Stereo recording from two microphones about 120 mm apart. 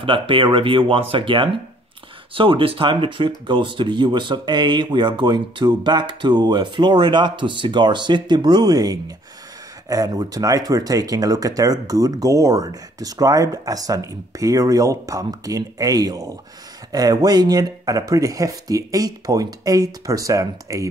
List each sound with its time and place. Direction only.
0.0 s speech: 45° right (ahead or behind); by 20.8 s 30° right (ahead or behind)